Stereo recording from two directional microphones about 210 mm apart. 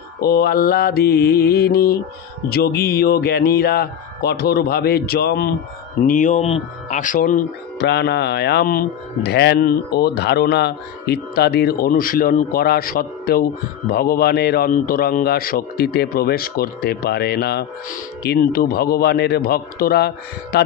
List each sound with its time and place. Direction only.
0.2 s mantra: 50° left (ahead or behind)
6.0 s speech: 40° left (ahead or behind)
7.8 s mantra: 55° left (ahead or behind)